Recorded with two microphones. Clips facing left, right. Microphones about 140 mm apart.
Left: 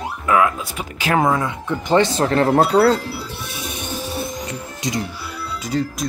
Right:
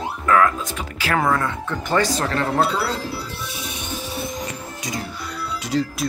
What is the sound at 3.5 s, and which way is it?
Music, 50° left (ahead or behind).